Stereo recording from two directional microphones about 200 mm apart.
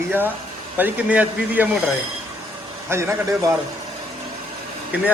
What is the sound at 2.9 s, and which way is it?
Speech, 15° right (ahead or behind).